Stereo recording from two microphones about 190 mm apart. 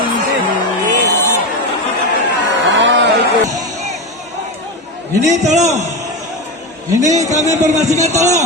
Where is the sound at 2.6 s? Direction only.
70° right (ahead or behind).